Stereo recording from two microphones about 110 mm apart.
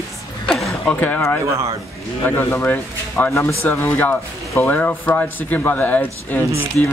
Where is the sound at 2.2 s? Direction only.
20° left (ahead or behind).